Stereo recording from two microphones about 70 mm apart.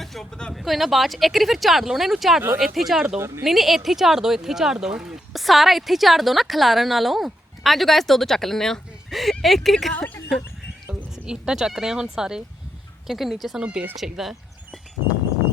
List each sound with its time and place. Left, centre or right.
0.0 s a sound: centre
0.5 s speech: centre
3.2 s speech: right
3.4 s speech: centre
11.3 s speech: centre